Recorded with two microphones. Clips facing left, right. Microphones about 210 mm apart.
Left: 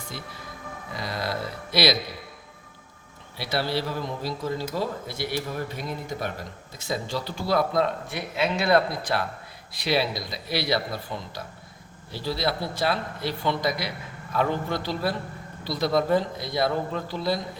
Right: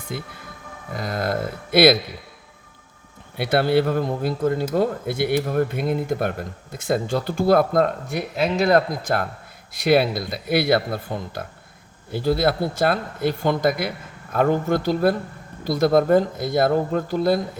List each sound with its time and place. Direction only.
0.1 s speech: 55° right (ahead or behind)
3.3 s speech: 55° right (ahead or behind)